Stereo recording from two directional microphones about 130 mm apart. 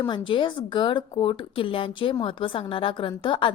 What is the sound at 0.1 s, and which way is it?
Speech, 40° left (ahead or behind).